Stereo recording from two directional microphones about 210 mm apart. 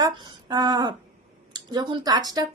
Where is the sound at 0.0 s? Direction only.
20° right (ahead or behind).